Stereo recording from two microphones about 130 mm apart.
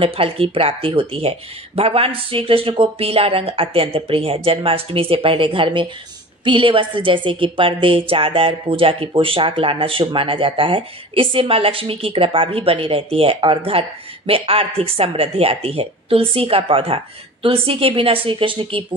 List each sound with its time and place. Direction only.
0.0 s speech: 45° right (ahead or behind)